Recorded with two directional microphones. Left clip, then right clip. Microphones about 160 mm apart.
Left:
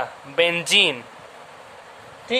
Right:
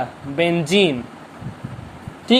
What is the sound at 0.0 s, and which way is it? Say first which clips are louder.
Speech: even; 15° left (ahead or behind).